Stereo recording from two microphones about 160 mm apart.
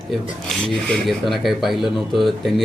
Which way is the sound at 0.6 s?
5° left (ahead or behind).